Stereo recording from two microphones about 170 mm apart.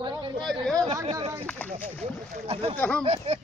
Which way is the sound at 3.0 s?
35° right (ahead or behind).